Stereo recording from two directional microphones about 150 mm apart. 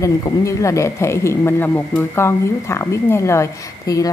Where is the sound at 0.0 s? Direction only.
20° left (ahead or behind).